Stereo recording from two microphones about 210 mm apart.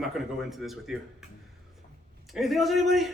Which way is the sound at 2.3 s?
Centre (ahead or behind).